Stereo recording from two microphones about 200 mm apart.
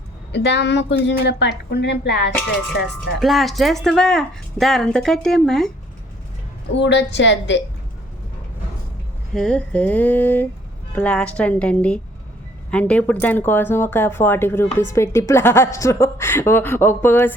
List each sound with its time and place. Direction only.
0.3 s a woman's voice: 60° left (ahead or behind)
3.2 s a woman's voice: centre (ahead or behind)
6.7 s a woman's voice: 60° left (ahead or behind)
9.3 s a woman's voice: 5° left (ahead or behind)